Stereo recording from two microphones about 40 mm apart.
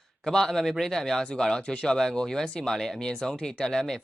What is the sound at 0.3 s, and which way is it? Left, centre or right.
Speech, centre.